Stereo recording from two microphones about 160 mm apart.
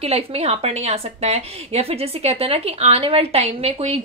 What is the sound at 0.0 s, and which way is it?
A woman's voice, 40° right (ahead or behind).